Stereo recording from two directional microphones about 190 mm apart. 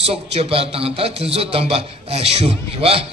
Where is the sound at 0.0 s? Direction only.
30° right (ahead or behind).